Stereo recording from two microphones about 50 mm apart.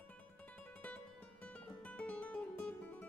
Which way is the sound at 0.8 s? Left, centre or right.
Left.